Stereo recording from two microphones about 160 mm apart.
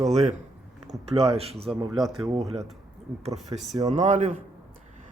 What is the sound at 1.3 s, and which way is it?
Speech, 35° right (ahead or behind).